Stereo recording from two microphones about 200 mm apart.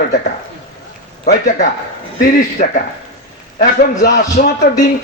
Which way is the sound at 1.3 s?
40° left (ahead or behind).